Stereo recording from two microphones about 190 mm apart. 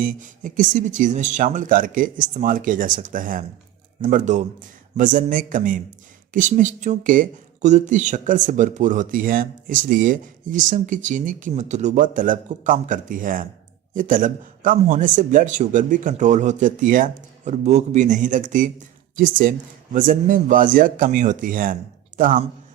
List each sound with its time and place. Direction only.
0.0 s speech: 45° right (ahead or behind)